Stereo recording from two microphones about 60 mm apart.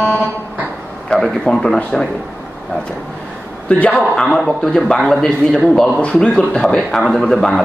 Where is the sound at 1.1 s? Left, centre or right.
Centre.